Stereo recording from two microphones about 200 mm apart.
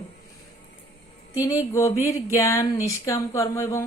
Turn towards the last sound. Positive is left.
turn(degrees=15)  # may be behind; listen again after turning